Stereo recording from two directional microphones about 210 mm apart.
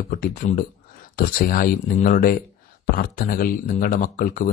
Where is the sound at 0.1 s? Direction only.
40° left (ahead or behind).